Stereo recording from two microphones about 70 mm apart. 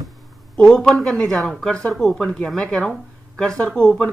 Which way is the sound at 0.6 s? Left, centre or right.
Centre.